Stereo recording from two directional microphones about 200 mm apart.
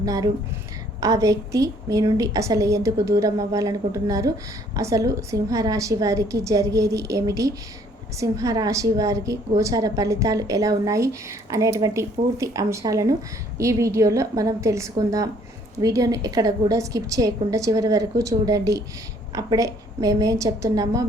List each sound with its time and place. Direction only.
0.0 s a woman's voice: 15° right (ahead or behind)